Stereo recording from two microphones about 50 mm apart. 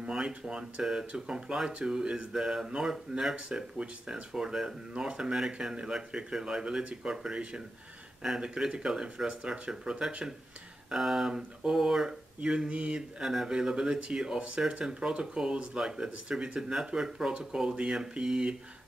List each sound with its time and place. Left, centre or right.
0.0 s speech: centre
13.2 s speech: centre